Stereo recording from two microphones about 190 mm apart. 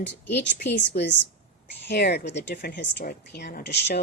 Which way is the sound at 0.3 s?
65° left (ahead or behind).